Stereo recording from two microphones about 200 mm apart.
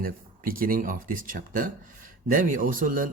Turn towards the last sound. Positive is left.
turn(degrees=-40)  # may be behind; listen again after turning